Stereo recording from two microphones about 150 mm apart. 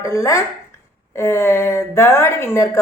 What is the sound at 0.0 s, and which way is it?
A woman's voice, 20° left (ahead or behind).